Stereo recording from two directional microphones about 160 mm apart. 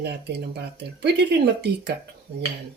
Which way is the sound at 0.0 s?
90° right.